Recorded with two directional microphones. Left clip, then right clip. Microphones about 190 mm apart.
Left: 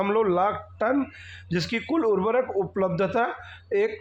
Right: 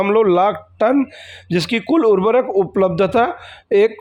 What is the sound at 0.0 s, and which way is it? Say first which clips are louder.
A man's voice: right 9 dB; 40° right (ahead or behind).